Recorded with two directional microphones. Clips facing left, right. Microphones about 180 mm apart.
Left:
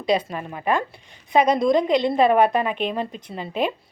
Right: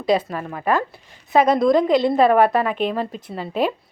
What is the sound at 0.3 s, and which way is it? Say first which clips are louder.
Speech: right 2 dB; 20° left (ahead or behind).